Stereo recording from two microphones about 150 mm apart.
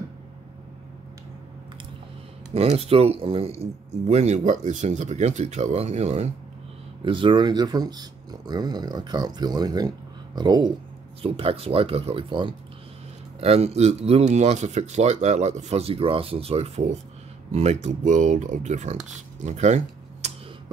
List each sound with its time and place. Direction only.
2.5 s speech: 45° right (ahead or behind)
7.1 s speech: 35° right (ahead or behind)
11.2 s speech: 40° right (ahead or behind)
13.4 s speech: 45° right (ahead or behind)
19.4 s a sound: 50° right (ahead or behind)